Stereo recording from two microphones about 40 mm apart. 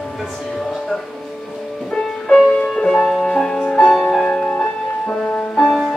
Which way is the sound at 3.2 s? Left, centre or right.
Centre.